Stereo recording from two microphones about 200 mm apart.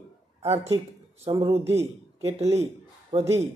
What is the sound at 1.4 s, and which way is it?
Speech, 30° right (ahead or behind).